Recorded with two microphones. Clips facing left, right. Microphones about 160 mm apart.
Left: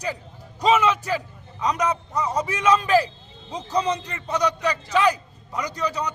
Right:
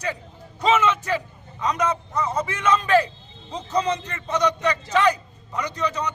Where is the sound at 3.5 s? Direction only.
10° left (ahead or behind).